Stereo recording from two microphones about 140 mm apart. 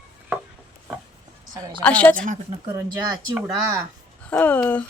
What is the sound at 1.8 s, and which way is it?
Speech, 10° left (ahead or behind).